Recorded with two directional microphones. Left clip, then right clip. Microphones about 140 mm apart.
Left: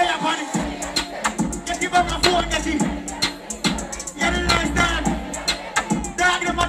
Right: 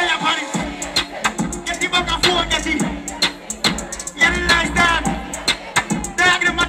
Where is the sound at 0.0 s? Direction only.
25° right (ahead or behind).